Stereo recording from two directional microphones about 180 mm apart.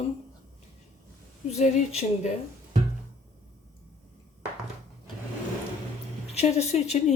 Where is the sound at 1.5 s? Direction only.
40° left (ahead or behind).